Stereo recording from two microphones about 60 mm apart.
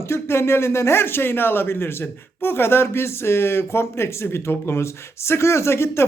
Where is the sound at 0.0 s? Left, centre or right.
Left.